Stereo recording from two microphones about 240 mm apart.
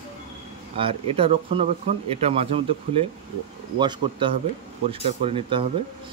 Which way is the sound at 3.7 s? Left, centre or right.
Centre.